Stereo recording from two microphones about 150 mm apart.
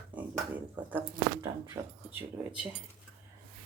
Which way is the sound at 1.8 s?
25° right (ahead or behind).